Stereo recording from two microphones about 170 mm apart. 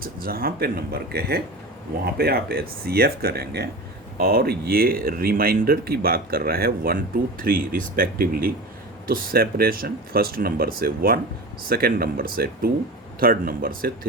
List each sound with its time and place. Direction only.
0.0 s speech: 60° right (ahead or behind)